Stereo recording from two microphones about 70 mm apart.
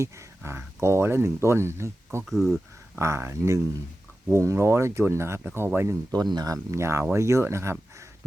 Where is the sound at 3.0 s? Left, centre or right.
Right.